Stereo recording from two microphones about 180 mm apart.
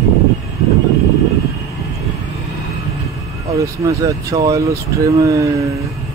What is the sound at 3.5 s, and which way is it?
Speech, 20° right (ahead or behind).